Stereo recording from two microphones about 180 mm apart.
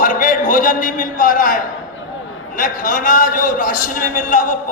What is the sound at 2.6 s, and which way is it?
A man's voice, 45° left (ahead or behind).